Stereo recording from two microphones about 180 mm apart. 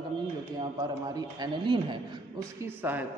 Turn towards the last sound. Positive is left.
turn(degrees=-10)  # may be behind; listen again after turning